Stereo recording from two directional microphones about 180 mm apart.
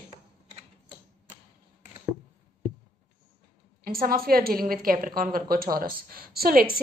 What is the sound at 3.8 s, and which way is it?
A woman's voice, 55° right (ahead or behind).